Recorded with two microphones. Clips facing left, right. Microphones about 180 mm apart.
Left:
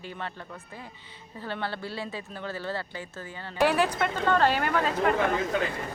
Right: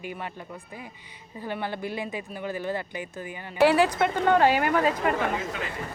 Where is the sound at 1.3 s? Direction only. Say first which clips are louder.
Right 2 dB; 15° right (ahead or behind).